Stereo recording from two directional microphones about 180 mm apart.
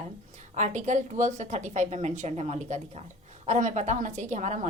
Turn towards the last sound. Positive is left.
turn(degrees=-40)  # may be behind; listen again after turning